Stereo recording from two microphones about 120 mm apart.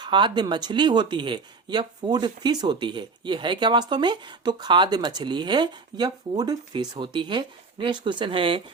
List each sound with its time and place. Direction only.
0.0 s speech: 40° right (ahead or behind)